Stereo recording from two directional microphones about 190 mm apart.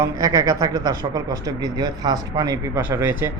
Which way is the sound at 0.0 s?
15° right (ahead or behind).